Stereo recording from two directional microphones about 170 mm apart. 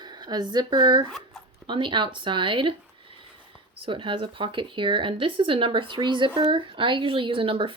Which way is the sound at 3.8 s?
30° right (ahead or behind).